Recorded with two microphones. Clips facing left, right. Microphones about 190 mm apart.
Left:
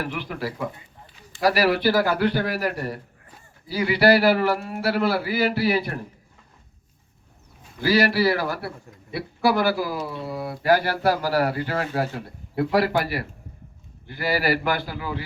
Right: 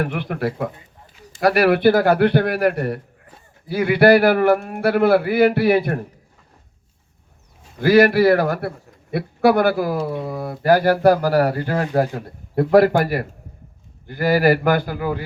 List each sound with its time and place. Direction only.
0.0 s a man's voice: 55° right (ahead or behind)
7.8 s speech: 55° right (ahead or behind)